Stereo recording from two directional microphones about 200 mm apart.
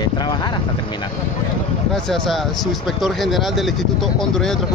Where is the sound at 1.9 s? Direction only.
Centre (ahead or behind).